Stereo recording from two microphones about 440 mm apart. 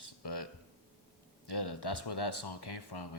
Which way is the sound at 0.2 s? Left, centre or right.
Left.